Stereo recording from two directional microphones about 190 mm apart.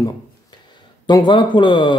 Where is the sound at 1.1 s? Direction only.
25° left (ahead or behind).